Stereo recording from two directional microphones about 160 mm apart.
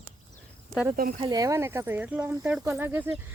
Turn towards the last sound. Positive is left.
turn(degrees=-10)  # may be behind; listen again after turning